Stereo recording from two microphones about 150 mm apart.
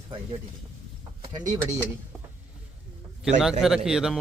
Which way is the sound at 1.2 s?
35° right (ahead or behind).